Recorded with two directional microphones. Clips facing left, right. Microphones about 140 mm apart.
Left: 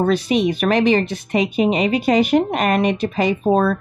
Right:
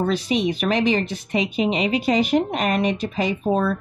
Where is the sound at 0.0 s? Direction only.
60° left (ahead or behind).